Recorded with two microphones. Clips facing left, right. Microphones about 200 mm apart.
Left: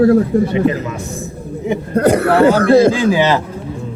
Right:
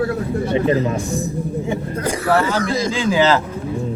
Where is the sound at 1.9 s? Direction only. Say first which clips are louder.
Left 7 dB; 60° left (ahead or behind).